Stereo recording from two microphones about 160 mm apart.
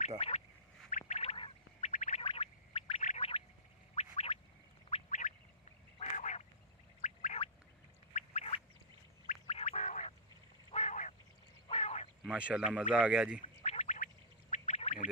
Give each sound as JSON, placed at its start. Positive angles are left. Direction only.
{"t": 0.2, "sound": "speech", "side_deg": 40}
{"t": 0.8, "sound": "a sound", "side_deg": 50}
{"t": 1.9, "sound": "a sound", "side_deg": 50}
{"t": 2.2, "sound": "boing", "side_deg": 40}
{"t": 5.9, "sound": "duck", "side_deg": 45}
{"t": 7.0, "sound": "gargling", "side_deg": 50}
{"t": 8.1, "sound": "duck", "side_deg": 45}
{"t": 10.7, "sound": "frog", "side_deg": 45}
{"t": 11.6, "sound": "duck", "side_deg": 40}
{"t": 12.2, "sound": "speech", "side_deg": -5}
{"t": 13.4, "sound": "quack", "side_deg": 40}